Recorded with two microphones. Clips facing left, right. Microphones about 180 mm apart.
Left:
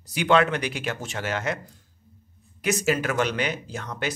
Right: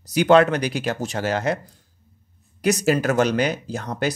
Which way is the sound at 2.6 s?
40° right (ahead or behind).